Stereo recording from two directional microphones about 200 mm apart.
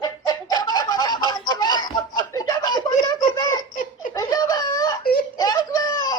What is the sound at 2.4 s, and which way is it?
Giggle, 20° left (ahead or behind).